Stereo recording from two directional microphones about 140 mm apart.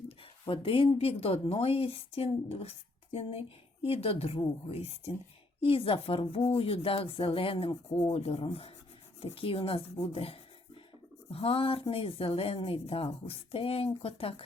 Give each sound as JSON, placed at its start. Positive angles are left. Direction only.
{"t": 0.4, "sound": "a woman's voice", "side_deg": 40}